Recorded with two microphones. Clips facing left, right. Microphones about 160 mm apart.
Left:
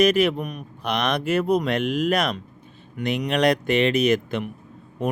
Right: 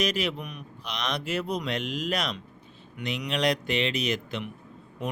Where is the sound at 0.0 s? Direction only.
55° left (ahead or behind).